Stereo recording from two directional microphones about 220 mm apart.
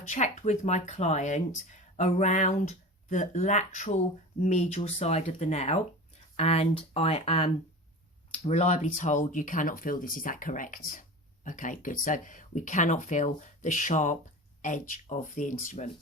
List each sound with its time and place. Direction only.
0.1 s speech: 30° left (ahead or behind)